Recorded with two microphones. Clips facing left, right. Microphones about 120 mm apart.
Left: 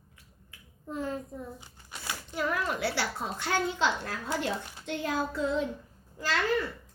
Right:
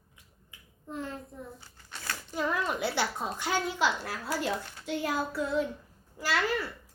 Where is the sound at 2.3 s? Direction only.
20° right (ahead or behind).